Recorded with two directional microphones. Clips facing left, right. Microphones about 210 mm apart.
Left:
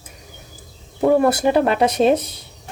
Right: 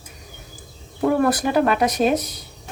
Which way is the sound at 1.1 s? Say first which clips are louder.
Left 3 dB; 25° left (ahead or behind).